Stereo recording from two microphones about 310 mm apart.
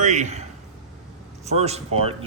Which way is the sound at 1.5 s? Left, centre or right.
Right.